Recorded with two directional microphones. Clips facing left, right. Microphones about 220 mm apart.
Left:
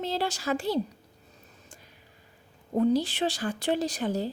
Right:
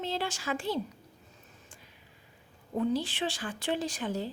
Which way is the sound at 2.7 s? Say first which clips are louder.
Left 5 dB; 40° left (ahead or behind).